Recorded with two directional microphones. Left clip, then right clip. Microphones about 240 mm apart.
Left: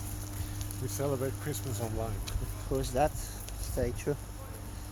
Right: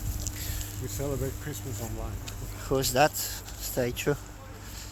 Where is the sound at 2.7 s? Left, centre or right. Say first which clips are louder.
Right 6 dB; right.